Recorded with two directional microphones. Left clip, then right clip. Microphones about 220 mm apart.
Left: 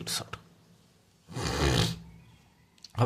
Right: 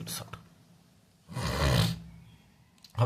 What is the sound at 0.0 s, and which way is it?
Speech, 35° left (ahead or behind).